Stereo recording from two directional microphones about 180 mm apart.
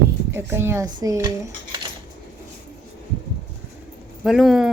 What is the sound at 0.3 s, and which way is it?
Speech, 15° right (ahead or behind).